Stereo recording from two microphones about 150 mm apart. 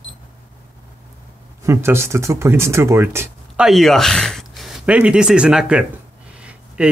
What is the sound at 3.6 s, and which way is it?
Speech, centre (ahead or behind).